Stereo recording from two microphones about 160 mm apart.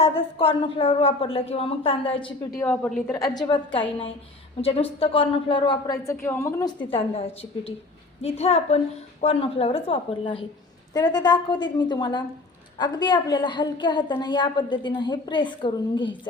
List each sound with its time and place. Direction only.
0.0 s a woman's voice: 35° left (ahead or behind)
3.3 s a woman's voice: 25° left (ahead or behind)
6.9 s a woman's voice: 35° left (ahead or behind)